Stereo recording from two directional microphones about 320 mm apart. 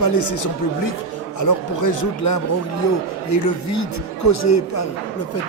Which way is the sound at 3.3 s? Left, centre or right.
Left.